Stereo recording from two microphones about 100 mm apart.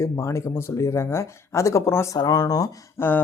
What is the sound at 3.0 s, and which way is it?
Speech, 25° left (ahead or behind).